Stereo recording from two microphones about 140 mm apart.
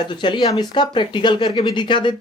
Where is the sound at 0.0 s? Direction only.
35° left (ahead or behind).